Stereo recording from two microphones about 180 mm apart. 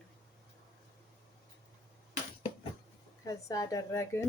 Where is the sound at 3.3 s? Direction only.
20° left (ahead or behind).